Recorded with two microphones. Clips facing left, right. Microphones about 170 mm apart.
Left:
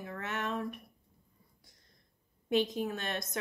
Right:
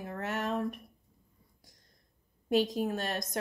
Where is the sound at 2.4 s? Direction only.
40° right (ahead or behind).